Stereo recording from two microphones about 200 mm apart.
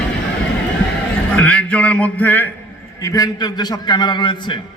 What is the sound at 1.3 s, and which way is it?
A man's voice, 5° left (ahead or behind).